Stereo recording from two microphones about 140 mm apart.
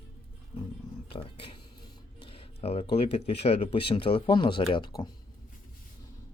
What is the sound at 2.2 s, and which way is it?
Speech, 45° left (ahead or behind).